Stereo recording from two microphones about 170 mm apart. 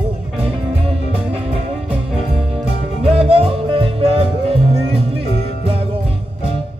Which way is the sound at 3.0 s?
35° right (ahead or behind).